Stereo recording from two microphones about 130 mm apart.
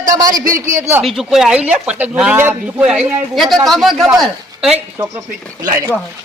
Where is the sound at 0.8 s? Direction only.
20° right (ahead or behind).